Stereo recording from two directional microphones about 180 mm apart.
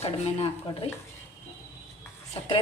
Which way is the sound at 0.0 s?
35° left (ahead or behind).